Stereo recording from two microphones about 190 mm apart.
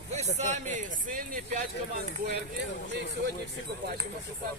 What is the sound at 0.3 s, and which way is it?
Speech, 40° right (ahead or behind).